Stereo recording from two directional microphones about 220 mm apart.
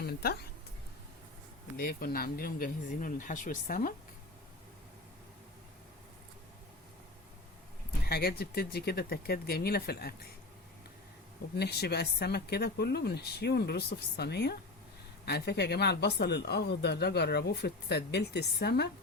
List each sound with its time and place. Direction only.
1.7 s speech: 40° left (ahead or behind)
8.0 s speech: 45° left (ahead or behind)
11.5 s speech: 45° left (ahead or behind)